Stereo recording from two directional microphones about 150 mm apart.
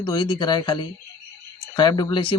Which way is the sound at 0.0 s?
30° left (ahead or behind).